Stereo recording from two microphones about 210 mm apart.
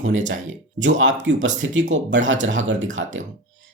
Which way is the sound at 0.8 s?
60° right (ahead or behind).